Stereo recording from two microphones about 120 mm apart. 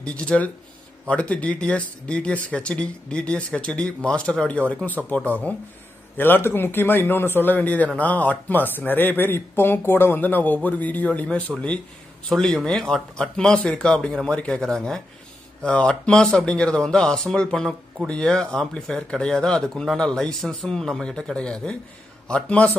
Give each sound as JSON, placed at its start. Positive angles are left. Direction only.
{"t": 0.0, "sound": "a man's voice", "side_deg": 10}